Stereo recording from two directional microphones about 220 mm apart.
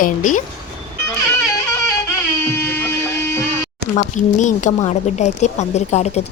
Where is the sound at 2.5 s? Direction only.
10° left (ahead or behind).